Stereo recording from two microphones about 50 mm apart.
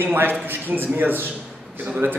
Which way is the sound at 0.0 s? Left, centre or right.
Right.